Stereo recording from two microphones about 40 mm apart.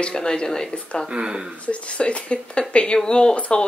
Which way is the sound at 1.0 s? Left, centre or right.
Right.